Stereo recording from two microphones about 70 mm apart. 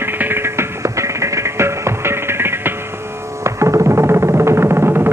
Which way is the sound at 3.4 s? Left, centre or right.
Right.